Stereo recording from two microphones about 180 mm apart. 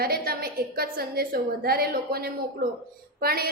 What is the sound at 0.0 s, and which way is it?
A woman's voice, 55° right (ahead or behind).